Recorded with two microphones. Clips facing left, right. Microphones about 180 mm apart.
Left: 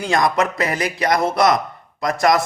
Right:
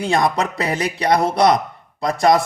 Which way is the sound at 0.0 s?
30° right (ahead or behind).